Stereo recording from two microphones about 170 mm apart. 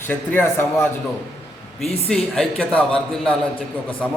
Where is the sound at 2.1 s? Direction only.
Centre (ahead or behind).